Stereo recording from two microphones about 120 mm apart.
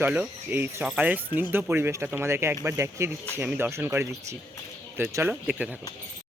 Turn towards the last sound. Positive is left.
turn(degrees=-10)  # may be behind; listen again after turning